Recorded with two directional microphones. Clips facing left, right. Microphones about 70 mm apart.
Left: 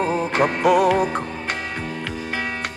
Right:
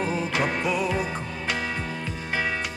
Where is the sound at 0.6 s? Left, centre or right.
Left.